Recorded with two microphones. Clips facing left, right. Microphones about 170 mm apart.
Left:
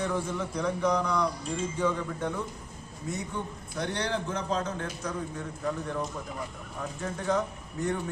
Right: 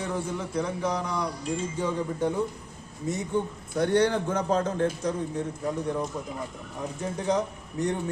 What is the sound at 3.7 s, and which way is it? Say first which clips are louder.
A man's voice: right 8 dB; 50° right (ahead or behind).